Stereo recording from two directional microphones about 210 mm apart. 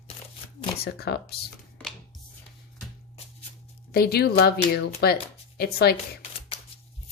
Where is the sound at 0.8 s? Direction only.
50° left (ahead or behind).